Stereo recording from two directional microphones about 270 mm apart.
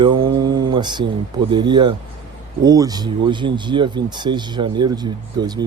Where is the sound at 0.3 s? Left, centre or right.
Centre.